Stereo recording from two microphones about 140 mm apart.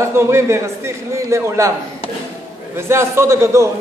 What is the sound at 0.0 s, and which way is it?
A man's voice, 20° right (ahead or behind).